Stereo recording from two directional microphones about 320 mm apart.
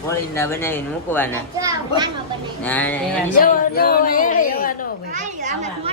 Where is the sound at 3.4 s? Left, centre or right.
Left.